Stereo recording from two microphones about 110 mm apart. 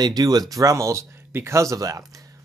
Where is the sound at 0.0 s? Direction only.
35° right (ahead or behind).